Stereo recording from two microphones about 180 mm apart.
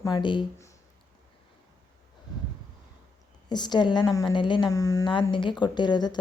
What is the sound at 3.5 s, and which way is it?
A woman's voice, 25° left (ahead or behind).